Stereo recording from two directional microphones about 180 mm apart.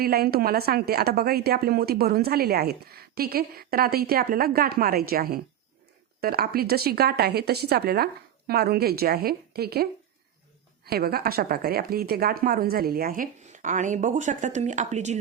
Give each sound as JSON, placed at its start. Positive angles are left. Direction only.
{"t": 0.0, "sound": "a woman's voice", "side_deg": -60}